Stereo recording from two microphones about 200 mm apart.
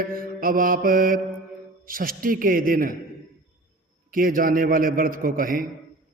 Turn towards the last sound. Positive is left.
turn(degrees=-45)  # may be behind; listen again after turning